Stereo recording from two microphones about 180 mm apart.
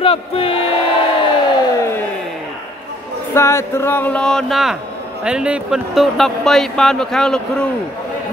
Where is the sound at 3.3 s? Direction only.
15° left (ahead or behind).